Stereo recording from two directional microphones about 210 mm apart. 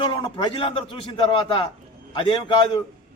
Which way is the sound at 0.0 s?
20° left (ahead or behind).